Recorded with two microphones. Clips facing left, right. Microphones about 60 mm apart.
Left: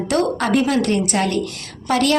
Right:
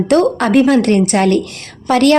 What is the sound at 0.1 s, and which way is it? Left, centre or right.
A woman's voice, right.